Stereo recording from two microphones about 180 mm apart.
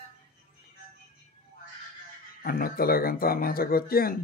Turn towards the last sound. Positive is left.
turn(degrees=55)  # may be behind; listen again after turning